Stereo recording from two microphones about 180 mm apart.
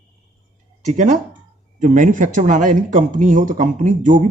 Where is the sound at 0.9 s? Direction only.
45° right (ahead or behind).